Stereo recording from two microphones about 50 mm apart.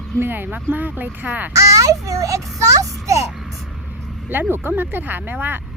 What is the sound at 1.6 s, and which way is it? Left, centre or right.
Speech, right.